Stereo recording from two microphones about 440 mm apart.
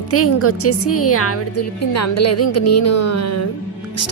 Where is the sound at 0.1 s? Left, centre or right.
Left.